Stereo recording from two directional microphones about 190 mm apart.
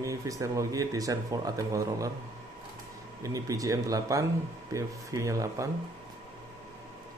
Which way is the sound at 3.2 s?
15° right (ahead or behind).